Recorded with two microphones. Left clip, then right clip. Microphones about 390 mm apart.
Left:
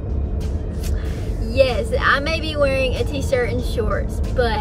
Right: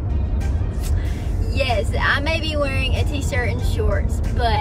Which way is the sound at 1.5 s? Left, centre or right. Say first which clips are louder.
Left 5 dB; centre.